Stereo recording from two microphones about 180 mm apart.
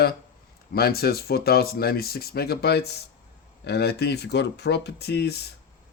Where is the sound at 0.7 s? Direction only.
60° left (ahead or behind).